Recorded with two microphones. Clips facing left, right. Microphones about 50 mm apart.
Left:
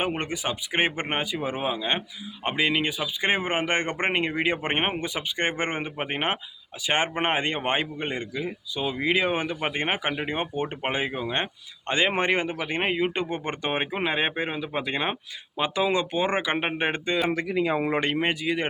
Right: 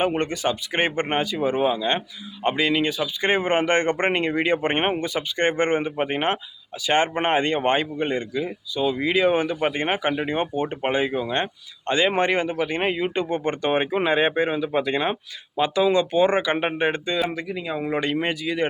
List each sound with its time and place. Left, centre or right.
0.0 s speech: centre
17.2 s speech: left
17.9 s speech: left